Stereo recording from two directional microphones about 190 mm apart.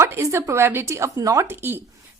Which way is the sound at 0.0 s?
15° right (ahead or behind).